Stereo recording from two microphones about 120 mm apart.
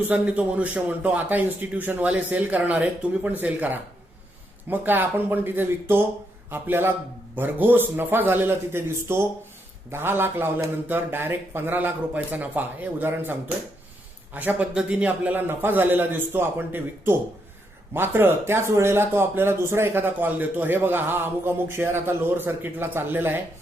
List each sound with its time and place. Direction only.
0.1 s a man's voice: 10° right (ahead or behind)
14.3 s a man's voice: 10° right (ahead or behind)